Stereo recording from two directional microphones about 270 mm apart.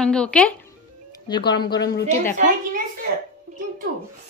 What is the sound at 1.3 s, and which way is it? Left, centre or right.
Speech, centre.